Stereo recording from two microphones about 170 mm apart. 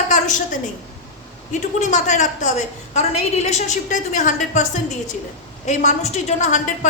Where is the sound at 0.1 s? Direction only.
50° left (ahead or behind).